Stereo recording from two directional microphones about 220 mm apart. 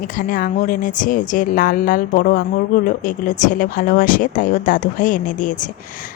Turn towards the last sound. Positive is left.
turn(degrees=35)  # may be behind; listen again after turning